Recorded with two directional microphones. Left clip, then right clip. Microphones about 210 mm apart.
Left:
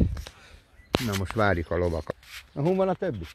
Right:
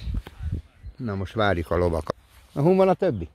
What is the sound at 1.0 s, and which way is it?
Speech, 15° left (ahead or behind).